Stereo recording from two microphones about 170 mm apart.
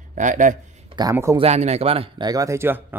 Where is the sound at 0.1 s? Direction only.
50° right (ahead or behind).